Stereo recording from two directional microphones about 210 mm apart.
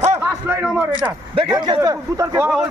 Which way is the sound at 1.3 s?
20° right (ahead or behind).